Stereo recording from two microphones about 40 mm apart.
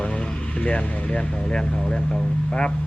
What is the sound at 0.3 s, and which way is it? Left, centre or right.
Speech, left.